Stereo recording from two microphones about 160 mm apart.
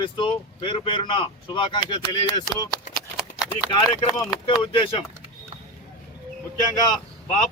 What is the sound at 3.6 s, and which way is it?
Speech, 35° left (ahead or behind).